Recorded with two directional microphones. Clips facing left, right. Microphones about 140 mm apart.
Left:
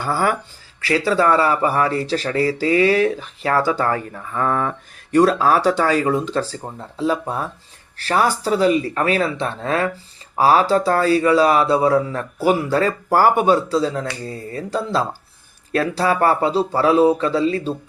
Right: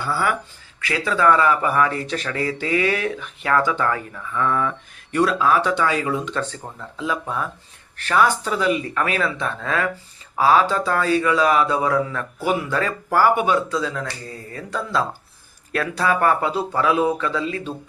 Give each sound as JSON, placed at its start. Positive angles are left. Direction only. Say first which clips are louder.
{"t": 0.0, "sound": "speech", "louder": "left 3 dB", "side_deg": 40}